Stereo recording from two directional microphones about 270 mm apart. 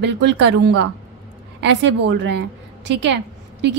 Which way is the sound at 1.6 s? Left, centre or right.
Right.